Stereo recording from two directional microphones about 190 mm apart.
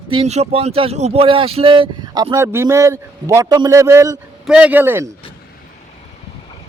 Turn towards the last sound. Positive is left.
turn(degrees=-10)  # may be behind; listen again after turning